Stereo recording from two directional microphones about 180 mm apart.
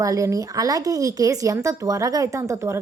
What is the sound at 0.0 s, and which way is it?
A woman's voice, 20° right (ahead or behind).